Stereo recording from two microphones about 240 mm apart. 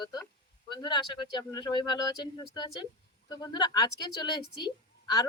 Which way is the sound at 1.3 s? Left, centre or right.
Centre.